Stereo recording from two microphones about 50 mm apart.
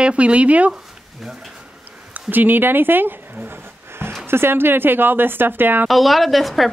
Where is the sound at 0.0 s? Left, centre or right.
Right.